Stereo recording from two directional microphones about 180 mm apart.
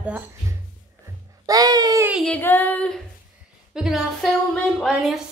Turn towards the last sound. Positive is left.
turn(degrees=-5)  # may be behind; listen again after turning